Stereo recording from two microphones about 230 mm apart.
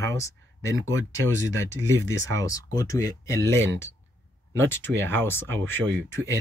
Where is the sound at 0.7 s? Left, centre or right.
Right.